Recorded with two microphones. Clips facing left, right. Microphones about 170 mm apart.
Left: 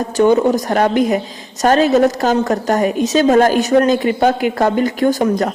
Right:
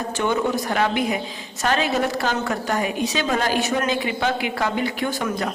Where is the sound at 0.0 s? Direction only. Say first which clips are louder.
Left 10 dB; 40° left (ahead or behind).